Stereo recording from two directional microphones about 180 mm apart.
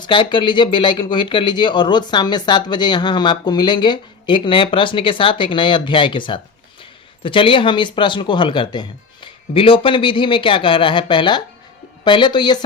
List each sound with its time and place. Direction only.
0.0 s speech: 25° left (ahead or behind)